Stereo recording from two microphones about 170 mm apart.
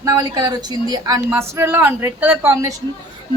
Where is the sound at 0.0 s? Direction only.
20° right (ahead or behind).